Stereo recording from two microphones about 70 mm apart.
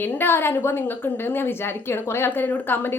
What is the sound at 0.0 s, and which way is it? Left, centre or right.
A woman's voice, left.